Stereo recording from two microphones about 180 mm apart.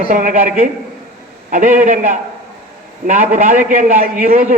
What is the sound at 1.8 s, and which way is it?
Speech, 45° right (ahead or behind).